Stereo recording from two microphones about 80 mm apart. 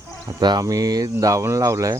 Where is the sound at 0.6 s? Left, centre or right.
Right.